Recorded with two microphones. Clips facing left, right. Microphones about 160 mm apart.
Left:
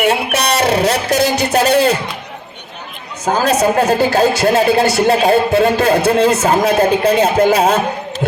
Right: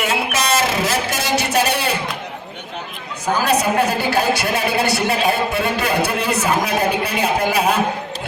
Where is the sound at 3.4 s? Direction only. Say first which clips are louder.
Left 5 dB; 40° left (ahead or behind).